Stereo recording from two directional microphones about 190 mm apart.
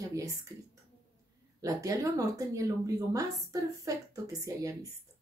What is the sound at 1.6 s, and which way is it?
Speech, 15° right (ahead or behind).